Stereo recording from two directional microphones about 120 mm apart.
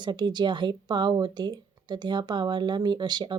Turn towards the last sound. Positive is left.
turn(degrees=-40)  # may be behind; listen again after turning